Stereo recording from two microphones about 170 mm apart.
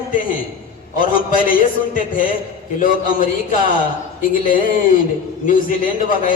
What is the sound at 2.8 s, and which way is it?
A man's voice, 55° left (ahead or behind).